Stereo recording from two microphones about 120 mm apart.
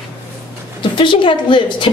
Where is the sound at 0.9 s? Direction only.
45° left (ahead or behind).